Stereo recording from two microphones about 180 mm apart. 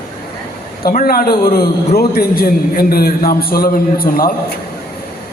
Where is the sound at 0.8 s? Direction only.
55° left (ahead or behind).